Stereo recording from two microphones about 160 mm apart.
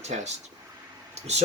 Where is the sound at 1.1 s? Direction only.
45° right (ahead or behind).